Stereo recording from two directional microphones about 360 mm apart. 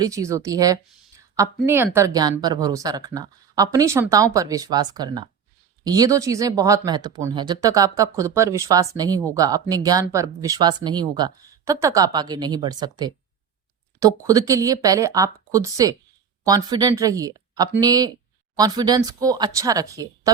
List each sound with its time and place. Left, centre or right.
0.0 s speech: centre